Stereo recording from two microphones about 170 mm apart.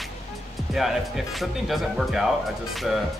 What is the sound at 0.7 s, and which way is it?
Speech, centre (ahead or behind).